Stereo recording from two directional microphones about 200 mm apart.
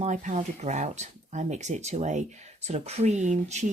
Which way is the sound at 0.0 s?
40° right (ahead or behind).